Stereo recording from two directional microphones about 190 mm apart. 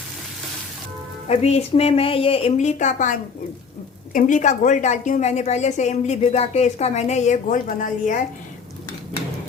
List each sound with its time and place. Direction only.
1.3 s a woman's voice: 35° left (ahead or behind)